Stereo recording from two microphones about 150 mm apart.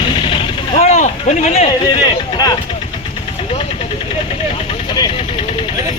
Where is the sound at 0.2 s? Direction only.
35° left (ahead or behind).